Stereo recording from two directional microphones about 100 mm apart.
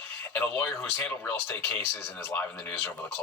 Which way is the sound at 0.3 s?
20° left (ahead or behind).